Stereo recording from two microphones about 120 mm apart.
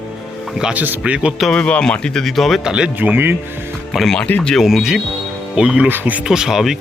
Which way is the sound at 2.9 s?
15° right (ahead or behind).